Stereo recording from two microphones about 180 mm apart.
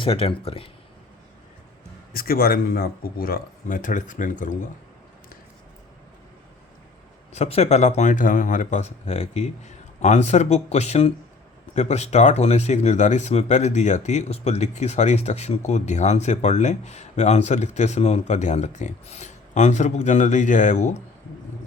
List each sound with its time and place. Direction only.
0.0 s speech: 30° left (ahead or behind)
2.1 s speech: 55° left (ahead or behind)
7.3 s speech: 35° left (ahead or behind)